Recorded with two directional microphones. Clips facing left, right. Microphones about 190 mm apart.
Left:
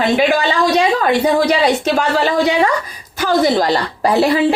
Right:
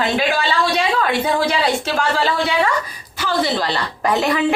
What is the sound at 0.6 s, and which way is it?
Speech, 40° left (ahead or behind).